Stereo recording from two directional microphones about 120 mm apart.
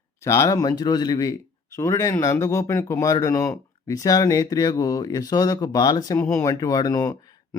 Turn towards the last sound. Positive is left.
turn(degrees=30)  # may be behind; listen again after turning